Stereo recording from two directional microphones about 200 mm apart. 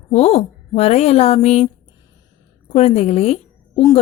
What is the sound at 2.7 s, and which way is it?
Speech, 30° left (ahead or behind).